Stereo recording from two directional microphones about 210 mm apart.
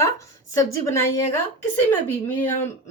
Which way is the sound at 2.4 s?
10° left (ahead or behind).